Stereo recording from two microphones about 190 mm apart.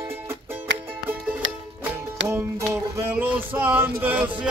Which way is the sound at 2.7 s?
10° right (ahead or behind).